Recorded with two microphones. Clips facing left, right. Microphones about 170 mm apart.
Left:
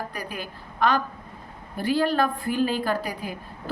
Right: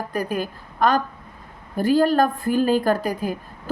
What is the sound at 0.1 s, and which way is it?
A woman's voice, 45° right (ahead or behind).